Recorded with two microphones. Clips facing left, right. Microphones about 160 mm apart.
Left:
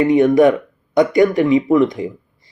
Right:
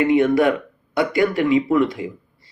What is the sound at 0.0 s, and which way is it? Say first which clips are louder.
Speech: left 4 dB; 20° left (ahead or behind).